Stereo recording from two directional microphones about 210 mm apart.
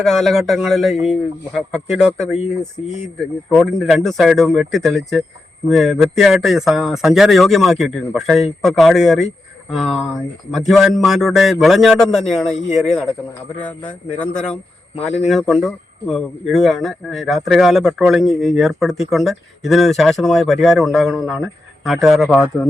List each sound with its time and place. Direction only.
0.0 s speech: centre (ahead or behind)
3.5 s a man's voice: centre (ahead or behind)